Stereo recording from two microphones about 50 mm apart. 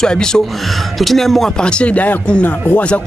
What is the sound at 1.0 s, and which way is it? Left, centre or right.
Speech, centre.